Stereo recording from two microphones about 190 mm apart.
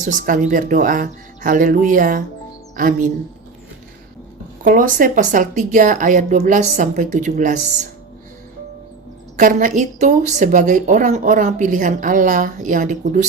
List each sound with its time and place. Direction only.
0.0 s speech: 40° right (ahead or behind)
4.6 s a woman's voice: 45° right (ahead or behind)
9.4 s speech: 45° right (ahead or behind)